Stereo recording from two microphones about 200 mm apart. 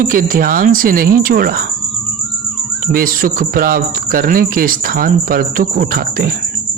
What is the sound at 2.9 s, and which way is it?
A man's voice, 45° right (ahead or behind).